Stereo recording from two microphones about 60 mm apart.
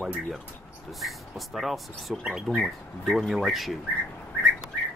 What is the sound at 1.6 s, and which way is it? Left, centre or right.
Speech, centre.